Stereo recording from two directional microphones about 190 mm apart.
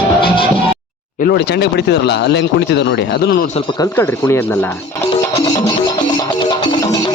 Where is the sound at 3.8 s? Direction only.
15° left (ahead or behind).